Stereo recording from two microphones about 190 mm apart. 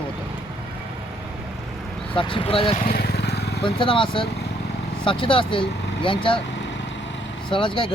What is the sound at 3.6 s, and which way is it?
Speech, 25° left (ahead or behind).